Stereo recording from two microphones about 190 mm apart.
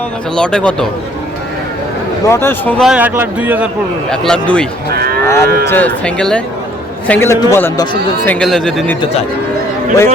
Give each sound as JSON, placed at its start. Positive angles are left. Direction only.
{"t": 0.3, "sound": "speech", "side_deg": 5}
{"t": 2.2, "sound": "speech", "side_deg": 15}
{"t": 4.1, "sound": "speech", "side_deg": 5}
{"t": 4.9, "sound": "cattle", "side_deg": -55}
{"t": 5.2, "sound": "moo", "side_deg": 15}
{"t": 5.6, "sound": "speech", "side_deg": 10}
{"t": 8.4, "sound": "speech", "side_deg": 0}